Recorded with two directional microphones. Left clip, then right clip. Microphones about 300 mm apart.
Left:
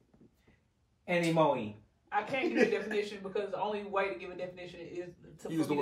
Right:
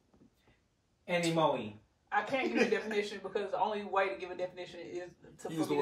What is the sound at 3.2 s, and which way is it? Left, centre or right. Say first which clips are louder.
Speech: left 1 dB; right.